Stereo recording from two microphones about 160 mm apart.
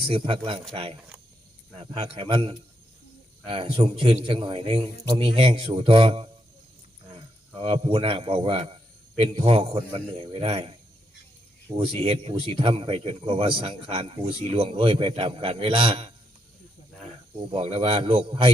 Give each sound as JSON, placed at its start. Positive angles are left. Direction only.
{"t": 0.0, "sound": "speech", "side_deg": -35}
{"t": 1.7, "sound": "a man's voice", "side_deg": -35}
{"t": 17.5, "sound": "speech", "side_deg": -35}